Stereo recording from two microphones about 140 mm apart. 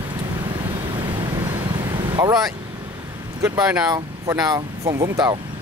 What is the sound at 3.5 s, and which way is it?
Speech, 30° right (ahead or behind).